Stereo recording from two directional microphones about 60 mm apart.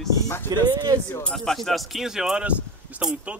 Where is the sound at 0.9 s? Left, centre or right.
Right.